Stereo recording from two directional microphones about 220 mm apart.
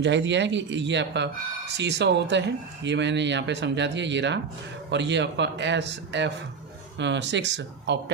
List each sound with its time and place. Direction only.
0.0 s speech: 55° right (ahead or behind)